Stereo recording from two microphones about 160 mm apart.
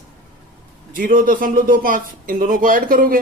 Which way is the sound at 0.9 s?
60° right (ahead or behind).